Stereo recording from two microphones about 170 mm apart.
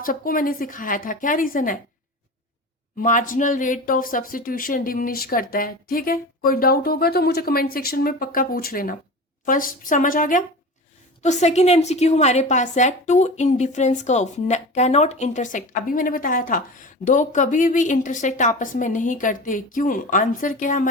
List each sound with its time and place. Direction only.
0.0 s a woman's voice: 55° left (ahead or behind)
3.0 s a woman's voice: 50° left (ahead or behind)